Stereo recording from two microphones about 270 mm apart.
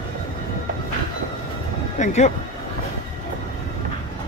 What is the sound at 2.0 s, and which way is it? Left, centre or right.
Speech, left.